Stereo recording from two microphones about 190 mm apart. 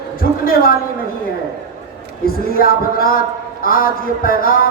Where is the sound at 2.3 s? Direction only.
50° left (ahead or behind).